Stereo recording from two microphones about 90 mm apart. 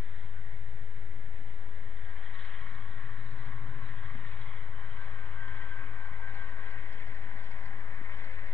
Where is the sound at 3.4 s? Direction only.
20° left (ahead or behind).